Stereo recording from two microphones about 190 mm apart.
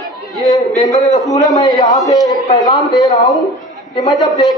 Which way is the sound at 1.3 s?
20° left (ahead or behind).